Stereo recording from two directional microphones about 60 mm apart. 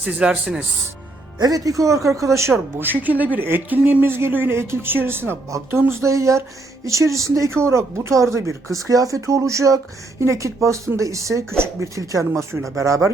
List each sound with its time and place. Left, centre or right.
0.2 s speech: centre
1.4 s speech: right
2.5 s speech: right
5.7 s speech: right
8.9 s speech: right